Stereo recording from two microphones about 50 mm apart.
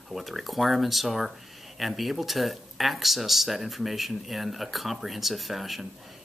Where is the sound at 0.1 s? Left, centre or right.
Centre.